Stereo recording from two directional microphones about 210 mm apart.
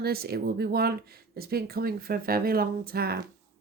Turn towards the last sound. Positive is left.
turn(degrees=-45)  # may be behind; listen again after turning